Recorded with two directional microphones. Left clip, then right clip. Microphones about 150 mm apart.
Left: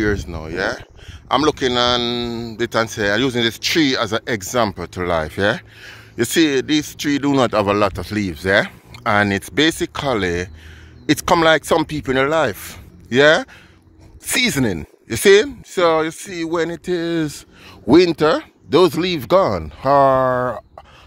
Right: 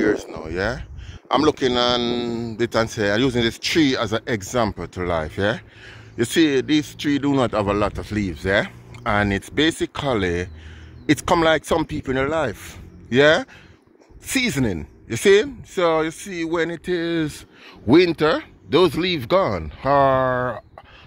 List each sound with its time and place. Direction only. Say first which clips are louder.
0.0 s speech: even; 5° left (ahead or behind)
7.2 s speech: left 5 dB; 30° left (ahead or behind)
12.0 s speech: left 5 dB; 35° left (ahead or behind)
13.1 s speech: left 3 dB; 10° left (ahead or behind)
14.2 s speech: left 4 dB; 20° left (ahead or behind)